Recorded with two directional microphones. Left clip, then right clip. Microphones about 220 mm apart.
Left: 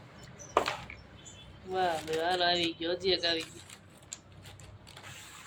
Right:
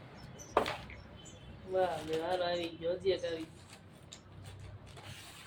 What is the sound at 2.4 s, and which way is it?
Speech, 45° left (ahead or behind).